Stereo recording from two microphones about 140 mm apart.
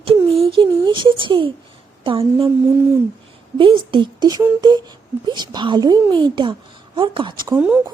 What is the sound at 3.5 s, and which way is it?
Speech, 35° right (ahead or behind).